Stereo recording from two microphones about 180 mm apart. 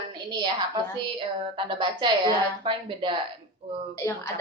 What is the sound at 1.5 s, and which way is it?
Speech, 25° right (ahead or behind).